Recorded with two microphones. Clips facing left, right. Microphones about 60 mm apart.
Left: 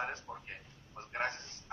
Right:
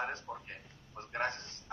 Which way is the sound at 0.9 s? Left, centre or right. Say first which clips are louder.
Right 1 dB; centre.